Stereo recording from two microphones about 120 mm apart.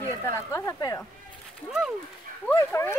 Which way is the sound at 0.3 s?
25° left (ahead or behind).